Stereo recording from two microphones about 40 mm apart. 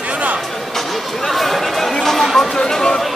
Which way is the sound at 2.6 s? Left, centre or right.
Centre.